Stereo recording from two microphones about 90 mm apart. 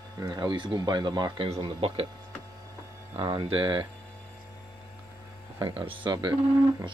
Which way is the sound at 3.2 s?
55° right (ahead or behind).